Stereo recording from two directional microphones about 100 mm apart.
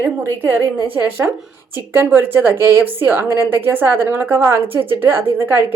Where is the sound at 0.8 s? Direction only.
15° right (ahead or behind).